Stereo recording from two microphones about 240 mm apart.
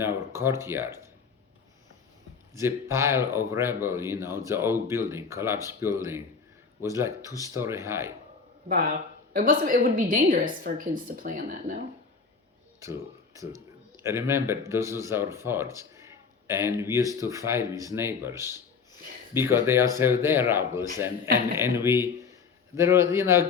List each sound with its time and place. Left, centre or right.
0.0 s speech: centre
2.6 s speech: centre
8.6 s a woman's voice: right
12.8 s speech: centre